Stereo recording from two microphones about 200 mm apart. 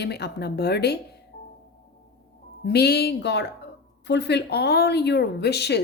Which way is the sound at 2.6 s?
55° left (ahead or behind).